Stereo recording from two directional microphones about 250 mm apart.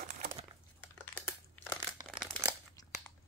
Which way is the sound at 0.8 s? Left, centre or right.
Centre.